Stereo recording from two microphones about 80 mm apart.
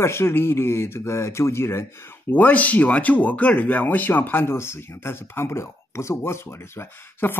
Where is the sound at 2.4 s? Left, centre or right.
Centre.